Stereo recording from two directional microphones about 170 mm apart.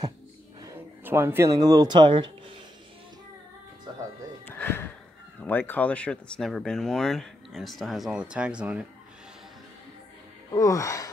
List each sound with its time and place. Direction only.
0.6 s speech: 15° right (ahead or behind)
4.5 s a sound: 10° left (ahead or behind)
5.4 s speech: 10° left (ahead or behind); by 8.8 s 5° right (ahead or behind)
10.5 s speech: 20° left (ahead or behind)